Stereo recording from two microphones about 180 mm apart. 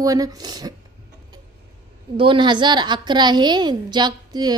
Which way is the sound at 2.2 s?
25° right (ahead or behind).